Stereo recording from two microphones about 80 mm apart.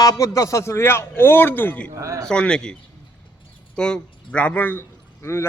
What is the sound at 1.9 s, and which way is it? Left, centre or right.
Speech, right.